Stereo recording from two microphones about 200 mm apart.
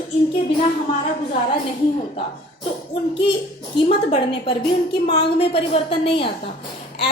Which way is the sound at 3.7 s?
25° left (ahead or behind).